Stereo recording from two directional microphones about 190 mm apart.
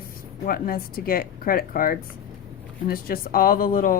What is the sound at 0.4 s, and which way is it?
Speech, 50° left (ahead or behind).